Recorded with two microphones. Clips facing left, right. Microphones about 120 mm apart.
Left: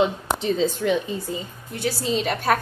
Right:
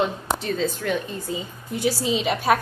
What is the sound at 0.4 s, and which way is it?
Speech, 20° left (ahead or behind).